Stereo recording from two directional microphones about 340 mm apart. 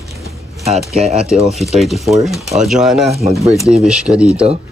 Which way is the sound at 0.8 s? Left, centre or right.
Centre.